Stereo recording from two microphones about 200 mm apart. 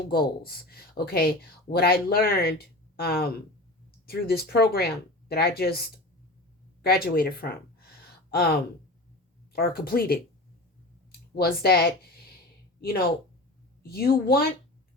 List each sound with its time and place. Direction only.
0.1 s speech: 50° left (ahead or behind)
6.8 s speech: 50° left (ahead or behind)
9.6 s speech: 50° left (ahead or behind)
11.3 s speech: 50° left (ahead or behind)